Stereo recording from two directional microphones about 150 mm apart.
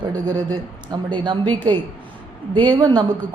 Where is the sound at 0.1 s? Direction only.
25° right (ahead or behind).